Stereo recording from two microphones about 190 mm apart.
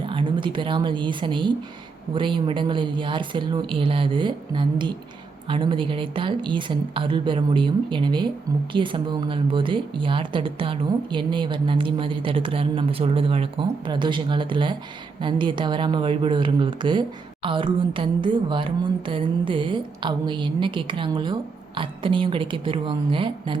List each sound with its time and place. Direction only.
0.0 s speech: 25° right (ahead or behind)